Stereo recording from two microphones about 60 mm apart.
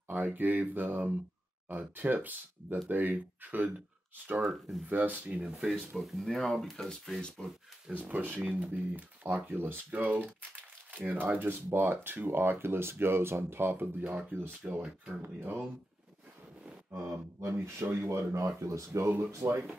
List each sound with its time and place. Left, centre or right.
0.1 s speech: right
4.5 s speech: centre
4.8 s speech: right
5.9 s speech: centre
6.9 s speech: centre
7.9 s speech: right
14.6 s speech: centre
15.2 s speech: right
16.9 s speech: right
18.4 s speech: right